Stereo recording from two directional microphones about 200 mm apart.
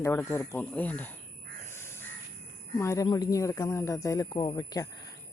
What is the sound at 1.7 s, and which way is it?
Crow, 10° left (ahead or behind).